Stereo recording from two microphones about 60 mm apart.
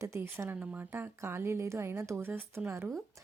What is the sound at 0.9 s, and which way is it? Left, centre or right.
Speech, right.